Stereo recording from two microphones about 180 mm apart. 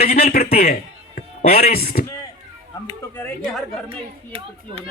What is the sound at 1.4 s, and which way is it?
Speech, 35° left (ahead or behind).